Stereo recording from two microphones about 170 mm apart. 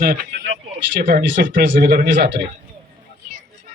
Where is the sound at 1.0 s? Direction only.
55° right (ahead or behind); by 2.4 s 85° right.